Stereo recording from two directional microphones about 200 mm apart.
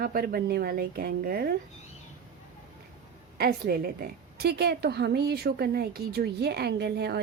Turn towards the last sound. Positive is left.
turn(degrees=-55)  # may be behind; listen again after turning